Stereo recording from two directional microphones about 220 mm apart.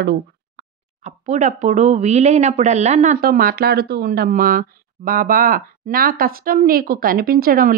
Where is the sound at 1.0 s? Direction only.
35° right (ahead or behind).